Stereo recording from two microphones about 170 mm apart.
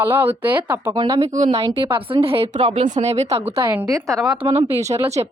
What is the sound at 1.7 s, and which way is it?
Speech, 30° right (ahead or behind).